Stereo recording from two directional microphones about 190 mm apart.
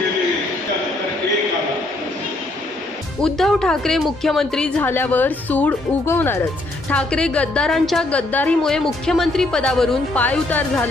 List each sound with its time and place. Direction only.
3.2 s a woman's voice: 5° left (ahead or behind)